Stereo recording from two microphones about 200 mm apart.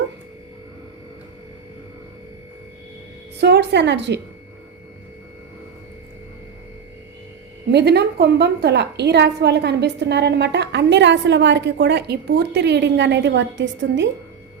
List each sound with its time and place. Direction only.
3.4 s a woman's voice: 55° right (ahead or behind)
7.7 s a woman's voice: 55° right (ahead or behind)